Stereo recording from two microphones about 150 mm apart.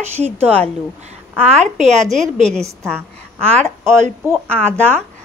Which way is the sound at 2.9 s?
15° right (ahead or behind).